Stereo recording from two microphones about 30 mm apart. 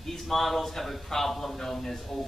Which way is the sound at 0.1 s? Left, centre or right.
Centre.